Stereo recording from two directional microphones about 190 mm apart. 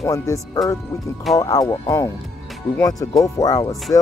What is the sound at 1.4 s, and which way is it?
Speech, 20° left (ahead or behind).